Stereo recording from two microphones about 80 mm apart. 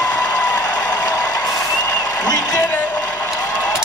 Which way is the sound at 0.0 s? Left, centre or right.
Left.